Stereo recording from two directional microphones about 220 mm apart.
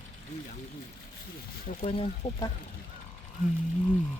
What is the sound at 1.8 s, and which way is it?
Speech, 25° left (ahead or behind).